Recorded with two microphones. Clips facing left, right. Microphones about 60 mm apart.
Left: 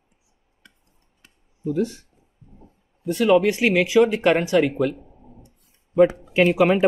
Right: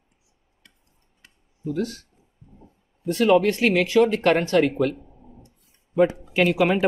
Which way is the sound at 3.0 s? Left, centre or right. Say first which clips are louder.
Left 1 dB; centre.